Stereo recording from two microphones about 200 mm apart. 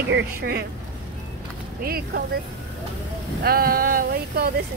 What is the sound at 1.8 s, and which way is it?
Speech, 50° right (ahead or behind).